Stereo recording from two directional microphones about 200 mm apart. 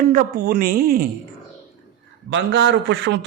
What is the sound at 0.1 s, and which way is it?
Speech, 45° right (ahead or behind).